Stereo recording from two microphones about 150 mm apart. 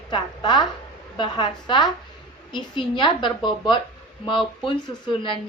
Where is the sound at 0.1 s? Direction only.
30° left (ahead or behind).